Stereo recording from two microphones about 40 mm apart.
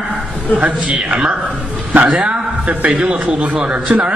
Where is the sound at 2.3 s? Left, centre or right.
Right.